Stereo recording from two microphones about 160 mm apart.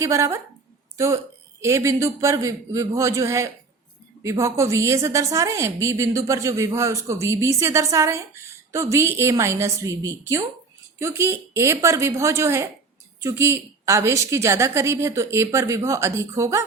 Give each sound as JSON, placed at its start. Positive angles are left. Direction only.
{"t": 0.0, "sound": "a woman's voice", "side_deg": -20}